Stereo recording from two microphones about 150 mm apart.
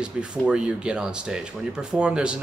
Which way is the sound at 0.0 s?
5° right (ahead or behind).